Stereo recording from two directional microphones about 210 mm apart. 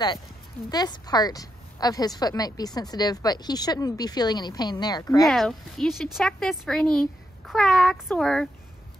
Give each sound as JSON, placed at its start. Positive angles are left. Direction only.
{"t": 0.7, "sound": "a woman's voice", "side_deg": 20}
{"t": 5.2, "sound": "a child's voice", "side_deg": 0}